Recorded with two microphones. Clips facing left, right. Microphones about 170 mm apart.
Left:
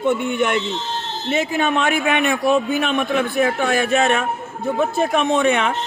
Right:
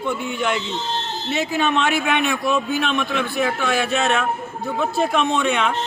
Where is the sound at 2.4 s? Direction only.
55° left (ahead or behind).